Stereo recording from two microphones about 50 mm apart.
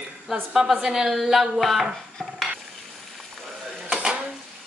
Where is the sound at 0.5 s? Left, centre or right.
Centre.